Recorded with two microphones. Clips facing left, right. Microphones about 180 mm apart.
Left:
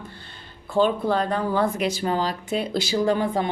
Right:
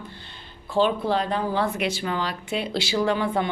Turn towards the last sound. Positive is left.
turn(degrees=40)  # may be behind; listen again after turning